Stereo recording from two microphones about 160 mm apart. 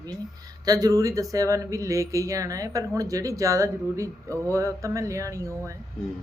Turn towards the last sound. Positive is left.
turn(degrees=-20)  # may be behind; listen again after turning